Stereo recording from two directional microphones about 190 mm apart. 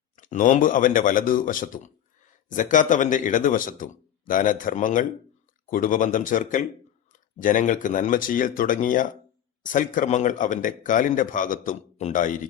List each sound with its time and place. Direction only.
0.2 s a man's voice: 45° left (ahead or behind)